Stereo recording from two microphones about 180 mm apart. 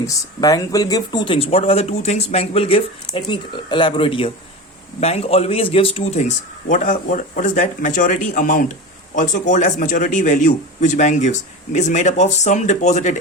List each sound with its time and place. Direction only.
0.0 s a man's voice: 15° left (ahead or behind); by 13.1 s 40° left (ahead or behind)